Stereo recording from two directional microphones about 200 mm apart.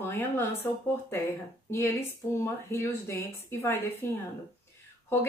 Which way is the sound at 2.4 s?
10° left (ahead or behind).